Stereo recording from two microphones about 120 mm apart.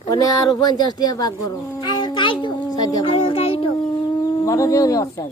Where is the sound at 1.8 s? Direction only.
40° left (ahead or behind).